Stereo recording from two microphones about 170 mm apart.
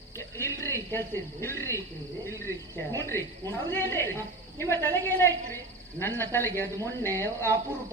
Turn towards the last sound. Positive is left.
turn(degrees=15)  # may be behind; listen again after turning